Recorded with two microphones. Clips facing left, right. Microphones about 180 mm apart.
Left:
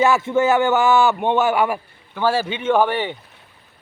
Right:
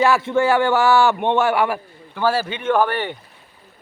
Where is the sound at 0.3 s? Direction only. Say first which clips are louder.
Left 1 dB; 20° left (ahead or behind).